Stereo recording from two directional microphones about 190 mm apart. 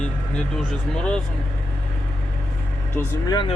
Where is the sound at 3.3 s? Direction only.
25° left (ahead or behind).